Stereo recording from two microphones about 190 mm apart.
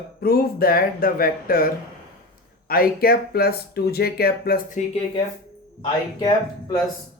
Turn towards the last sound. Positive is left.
turn(degrees=20)  # may be behind; listen again after turning